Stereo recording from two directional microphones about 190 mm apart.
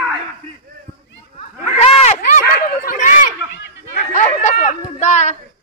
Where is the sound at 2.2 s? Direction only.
45° left (ahead or behind).